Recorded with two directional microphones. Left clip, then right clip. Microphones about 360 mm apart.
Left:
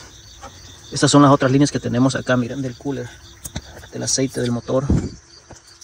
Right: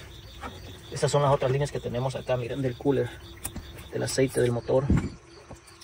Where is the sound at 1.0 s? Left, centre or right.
Left.